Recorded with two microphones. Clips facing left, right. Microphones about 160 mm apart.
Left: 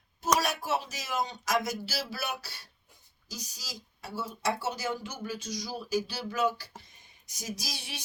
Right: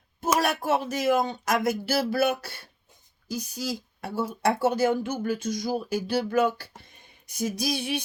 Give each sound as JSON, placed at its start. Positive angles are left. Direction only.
{"t": 0.3, "sound": "speech", "side_deg": -55}